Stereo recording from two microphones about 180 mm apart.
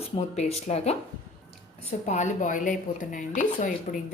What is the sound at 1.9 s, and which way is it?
Speech, 40° left (ahead or behind).